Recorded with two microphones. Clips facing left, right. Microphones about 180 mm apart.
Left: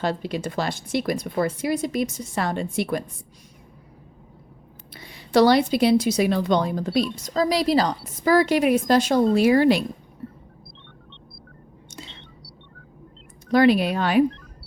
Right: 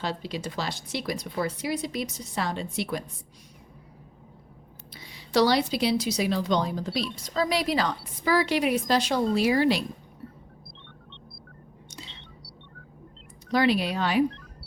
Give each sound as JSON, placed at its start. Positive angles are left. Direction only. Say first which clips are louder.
{"t": 0.0, "sound": "speech", "louder": "left 6 dB", "side_deg": 55}
{"t": 4.9, "sound": "speech", "louder": "left 5 dB", "side_deg": 55}
{"t": 13.5, "sound": "speech", "louder": "left 6 dB", "side_deg": 55}